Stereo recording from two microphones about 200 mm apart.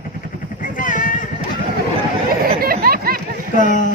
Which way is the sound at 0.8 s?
40° left (ahead or behind).